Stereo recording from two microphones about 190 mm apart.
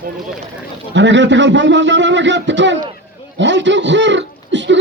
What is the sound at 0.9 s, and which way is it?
A man's voice, 70° right (ahead or behind).